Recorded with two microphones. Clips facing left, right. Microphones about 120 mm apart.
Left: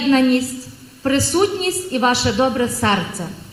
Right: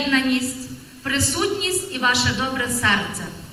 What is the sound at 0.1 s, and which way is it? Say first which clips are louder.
A woman's voice: left 8 dB; 35° left (ahead or behind).